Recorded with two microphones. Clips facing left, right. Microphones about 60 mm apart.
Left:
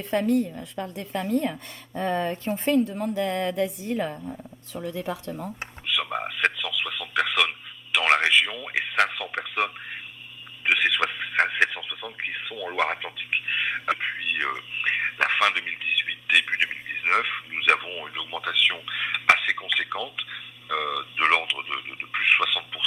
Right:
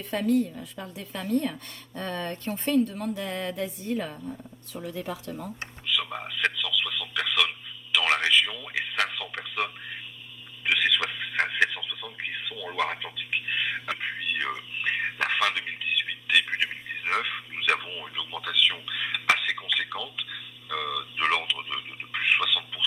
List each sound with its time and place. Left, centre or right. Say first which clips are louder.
0.5 s speech: left 5 dB; centre
3.1 s speech: left 5 dB; centre
3.4 s a woman's voice: left 6 dB; left
3.8 s speech: left 3 dB; centre
5.3 s speech: left 2 dB; left
5.8 s a sound: left 3 dB; left
7.9 s a man's voice: left 3 dB; left
10.6 s a sound: left 3 dB; left